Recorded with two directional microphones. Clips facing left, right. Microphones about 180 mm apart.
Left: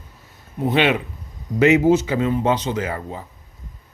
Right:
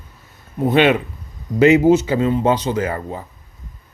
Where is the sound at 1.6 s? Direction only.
30° right (ahead or behind).